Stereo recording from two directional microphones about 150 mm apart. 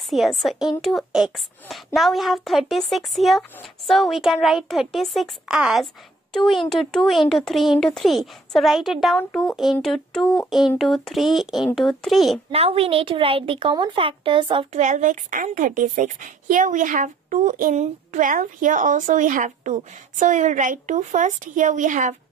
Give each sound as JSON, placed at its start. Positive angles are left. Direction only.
{"t": 0.1, "sound": "speech", "side_deg": 0}
{"t": 12.4, "sound": "speech", "side_deg": -40}
{"t": 14.8, "sound": "a woman's voice", "side_deg": -55}